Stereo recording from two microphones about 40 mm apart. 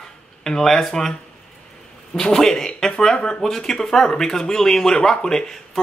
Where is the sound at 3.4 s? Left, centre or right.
Centre.